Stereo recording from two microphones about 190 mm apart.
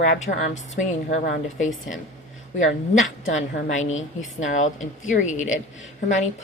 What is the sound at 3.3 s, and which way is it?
A woman's voice, 40° left (ahead or behind).